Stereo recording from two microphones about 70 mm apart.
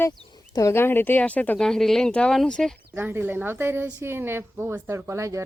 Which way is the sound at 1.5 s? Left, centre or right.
Centre.